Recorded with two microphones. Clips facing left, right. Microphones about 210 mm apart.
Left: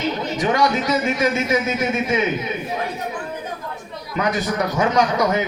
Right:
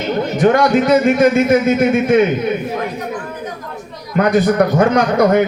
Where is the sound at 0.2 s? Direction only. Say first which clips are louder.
Right 9 dB; 55° right (ahead or behind).